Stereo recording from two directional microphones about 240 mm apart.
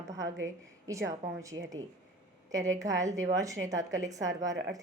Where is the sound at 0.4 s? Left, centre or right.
Centre.